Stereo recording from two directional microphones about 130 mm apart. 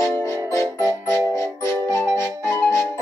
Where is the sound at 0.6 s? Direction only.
20° left (ahead or behind).